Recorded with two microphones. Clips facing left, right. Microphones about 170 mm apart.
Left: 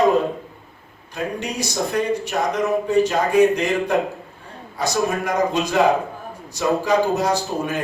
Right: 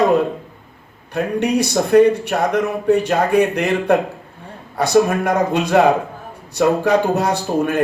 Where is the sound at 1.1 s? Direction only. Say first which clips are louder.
Right 8 dB; 60° right (ahead or behind).